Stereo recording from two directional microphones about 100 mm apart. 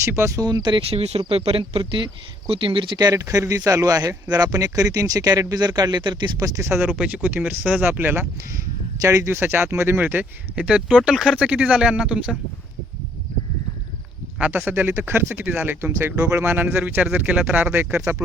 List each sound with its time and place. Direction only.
0.0 s speech: 25° right (ahead or behind)
0.3 s speech: 45° right (ahead or behind)
0.8 s speech: 85° right
1.3 s speech: 70° right (ahead or behind); by 6.3 s 50° right (ahead or behind)
6.4 s speech: 30° right (ahead or behind)
6.9 s speech: 10° right (ahead or behind)
14.3 s speech: 10° right (ahead or behind)